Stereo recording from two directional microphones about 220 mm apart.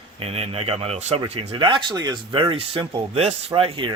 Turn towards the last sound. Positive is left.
turn(degrees=-25)  # may be behind; listen again after turning